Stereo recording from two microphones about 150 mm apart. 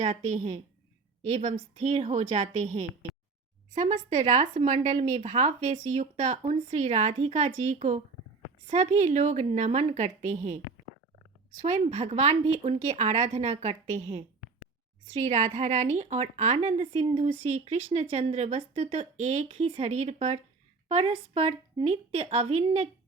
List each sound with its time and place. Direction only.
0.0 s a woman's voice: 55° right (ahead or behind)